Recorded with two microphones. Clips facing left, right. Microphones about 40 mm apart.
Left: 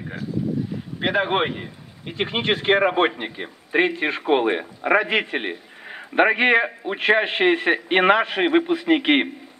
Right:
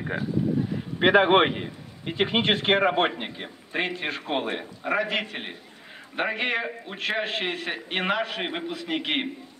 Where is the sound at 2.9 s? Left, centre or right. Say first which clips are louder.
Left 4 dB; left.